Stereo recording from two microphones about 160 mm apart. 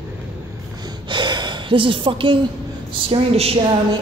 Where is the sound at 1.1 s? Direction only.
30° right (ahead or behind).